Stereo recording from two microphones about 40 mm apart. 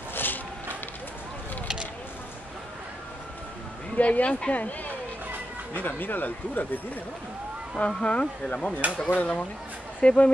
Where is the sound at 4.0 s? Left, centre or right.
Left.